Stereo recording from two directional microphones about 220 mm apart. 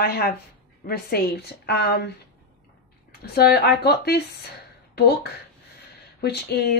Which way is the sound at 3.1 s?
45° left (ahead or behind).